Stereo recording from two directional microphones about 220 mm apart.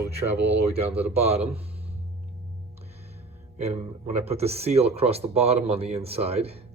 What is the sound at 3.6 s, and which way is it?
Speech, 30° right (ahead or behind).